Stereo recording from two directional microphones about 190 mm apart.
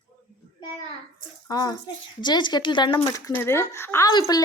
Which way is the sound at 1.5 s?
20° left (ahead or behind).